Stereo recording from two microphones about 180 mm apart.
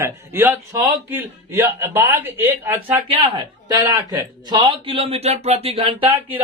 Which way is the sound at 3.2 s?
25° right (ahead or behind).